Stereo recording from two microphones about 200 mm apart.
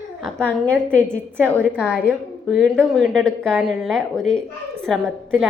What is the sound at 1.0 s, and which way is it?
A woman's voice, 10° right (ahead or behind).